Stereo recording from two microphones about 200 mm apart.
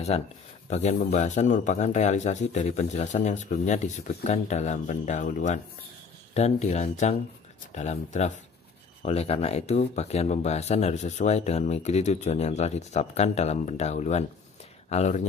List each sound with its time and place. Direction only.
0.1 s speech: 30° left (ahead or behind)